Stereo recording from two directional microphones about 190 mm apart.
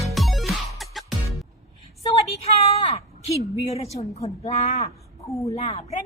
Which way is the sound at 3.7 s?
35° left (ahead or behind).